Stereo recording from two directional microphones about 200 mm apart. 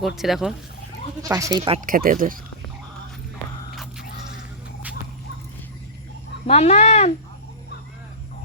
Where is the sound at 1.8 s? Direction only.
45° right (ahead or behind).